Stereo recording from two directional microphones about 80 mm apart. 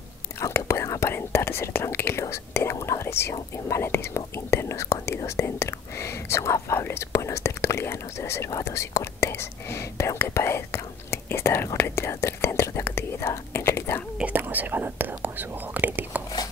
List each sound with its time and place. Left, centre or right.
0.4 s speech: left
14.1 s speech: centre